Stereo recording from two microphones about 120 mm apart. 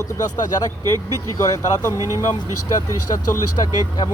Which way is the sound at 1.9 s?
25° right (ahead or behind).